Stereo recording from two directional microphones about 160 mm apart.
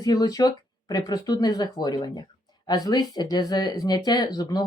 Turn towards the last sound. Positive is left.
turn(degrees=25)  # may be behind; listen again after turning